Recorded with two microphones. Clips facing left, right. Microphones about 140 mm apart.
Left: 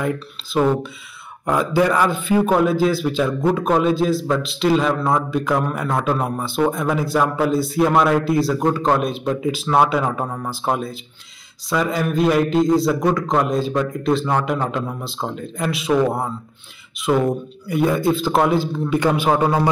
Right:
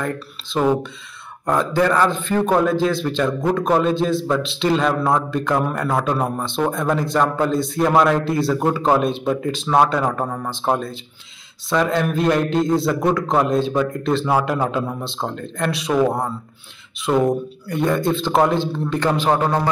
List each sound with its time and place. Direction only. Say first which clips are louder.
0.0 s a man's voice: left 2 dB; 5° left (ahead or behind)